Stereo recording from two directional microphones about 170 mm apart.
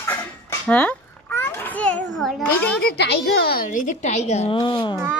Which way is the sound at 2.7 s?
75° left (ahead or behind).